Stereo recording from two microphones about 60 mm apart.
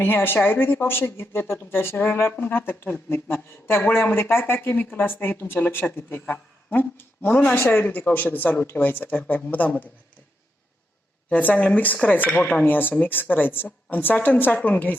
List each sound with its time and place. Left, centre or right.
0.0 s speech: left
11.3 s speech: left